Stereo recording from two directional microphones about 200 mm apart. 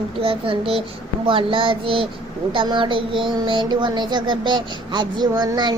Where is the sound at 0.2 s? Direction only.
25° right (ahead or behind).